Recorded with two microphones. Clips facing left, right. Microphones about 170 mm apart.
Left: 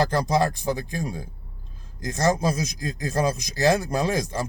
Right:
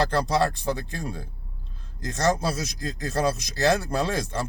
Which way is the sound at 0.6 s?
15° left (ahead or behind).